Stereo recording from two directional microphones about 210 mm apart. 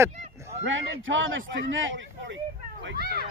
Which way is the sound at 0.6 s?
65° right (ahead or behind).